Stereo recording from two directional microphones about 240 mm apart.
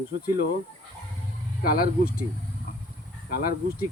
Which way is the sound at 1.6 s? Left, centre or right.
Left.